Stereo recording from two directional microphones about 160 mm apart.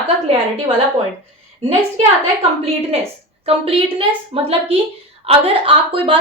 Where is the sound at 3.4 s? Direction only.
35° right (ahead or behind).